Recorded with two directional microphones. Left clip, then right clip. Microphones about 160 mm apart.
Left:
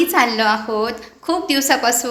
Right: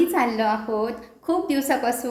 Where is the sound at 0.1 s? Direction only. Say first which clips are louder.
Left 6 dB; 5° right (ahead or behind).